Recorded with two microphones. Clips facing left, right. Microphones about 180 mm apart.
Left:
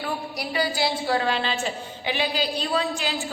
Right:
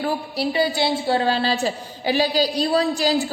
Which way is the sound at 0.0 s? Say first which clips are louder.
Right 7 dB; 25° right (ahead or behind).